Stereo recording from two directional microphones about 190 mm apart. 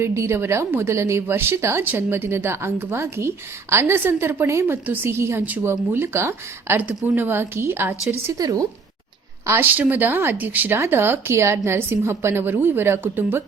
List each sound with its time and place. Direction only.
0.0 s a woman's voice: 15° right (ahead or behind)